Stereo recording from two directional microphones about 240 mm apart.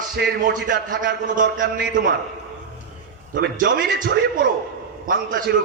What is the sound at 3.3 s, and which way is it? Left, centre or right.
A man's voice, right.